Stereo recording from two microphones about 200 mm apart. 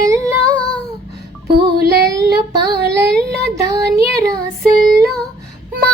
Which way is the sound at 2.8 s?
55° right (ahead or behind).